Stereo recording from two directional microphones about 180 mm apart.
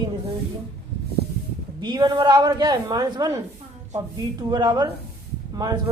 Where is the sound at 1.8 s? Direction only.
25° right (ahead or behind).